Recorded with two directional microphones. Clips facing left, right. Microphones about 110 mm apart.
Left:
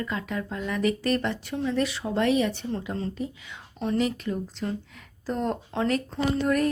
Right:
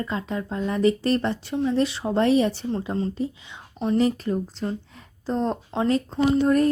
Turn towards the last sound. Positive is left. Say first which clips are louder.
# right 5 dB
turn(degrees=-30)  # may be behind; listen again after turning